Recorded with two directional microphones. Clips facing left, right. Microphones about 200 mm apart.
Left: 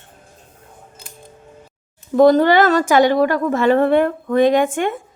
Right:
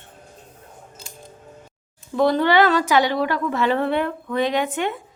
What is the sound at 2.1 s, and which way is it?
A woman's voice, 45° left (ahead or behind).